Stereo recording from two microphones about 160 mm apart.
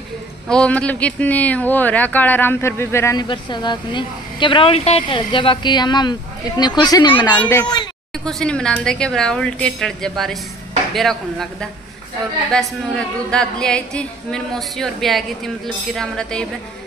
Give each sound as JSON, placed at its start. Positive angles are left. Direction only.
{"t": 0.5, "sound": "speech", "side_deg": 5}
{"t": 3.2, "sound": "speech", "side_deg": 25}
{"t": 7.3, "sound": "speech", "side_deg": 15}